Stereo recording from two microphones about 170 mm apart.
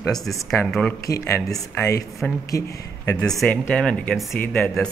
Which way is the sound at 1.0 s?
20° left (ahead or behind).